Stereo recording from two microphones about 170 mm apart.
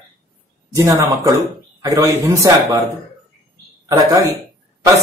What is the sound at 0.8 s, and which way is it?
Speech, 20° right (ahead or behind).